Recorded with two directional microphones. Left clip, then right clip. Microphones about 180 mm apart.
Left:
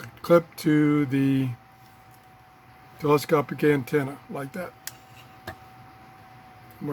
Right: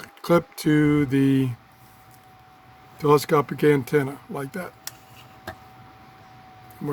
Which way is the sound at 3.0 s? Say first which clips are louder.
Right 3 dB; 35° right (ahead or behind).